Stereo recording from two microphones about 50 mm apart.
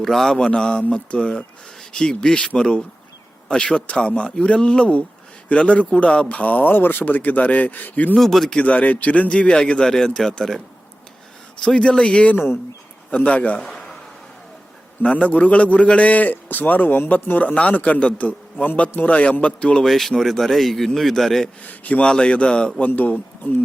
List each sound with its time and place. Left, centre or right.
0.0 s a man's voice: centre
0.3 s a man's voice: centre; by 8.1 s left
8.1 s a man's voice: centre
8.6 s a man's voice: left; by 10.6 s centre
11.6 s a man's voice: left
13.6 s a sound: centre
15.0 s a man's voice: left
19.8 s a man's voice: centre
21.6 s speech: left
22.0 s a man's voice: centre
23.0 s speech: left